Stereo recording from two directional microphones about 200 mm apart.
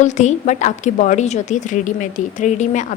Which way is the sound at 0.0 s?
35° left (ahead or behind).